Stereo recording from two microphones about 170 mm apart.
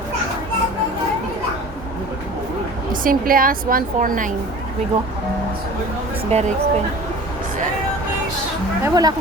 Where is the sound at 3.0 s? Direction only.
55° right (ahead or behind).